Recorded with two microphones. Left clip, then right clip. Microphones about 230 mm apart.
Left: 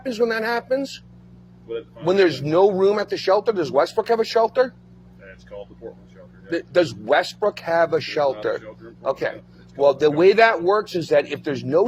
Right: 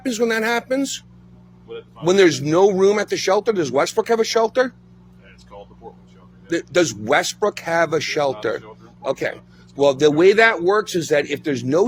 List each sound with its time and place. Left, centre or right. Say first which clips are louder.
0.0 s speech: right 2 dB; right
2.0 s speech: right 3 dB; right
6.5 s speech: right 1 dB; right